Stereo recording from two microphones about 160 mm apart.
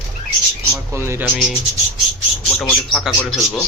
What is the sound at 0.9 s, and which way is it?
Speech, 15° right (ahead or behind).